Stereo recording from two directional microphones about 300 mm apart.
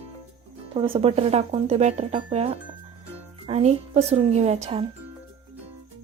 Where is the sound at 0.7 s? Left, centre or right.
Centre.